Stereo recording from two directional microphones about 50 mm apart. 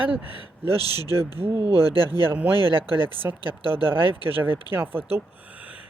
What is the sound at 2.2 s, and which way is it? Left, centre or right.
Speech, right.